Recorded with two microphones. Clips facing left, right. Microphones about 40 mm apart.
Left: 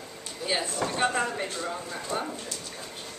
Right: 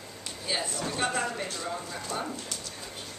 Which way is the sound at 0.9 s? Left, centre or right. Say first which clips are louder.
Left 2 dB; centre.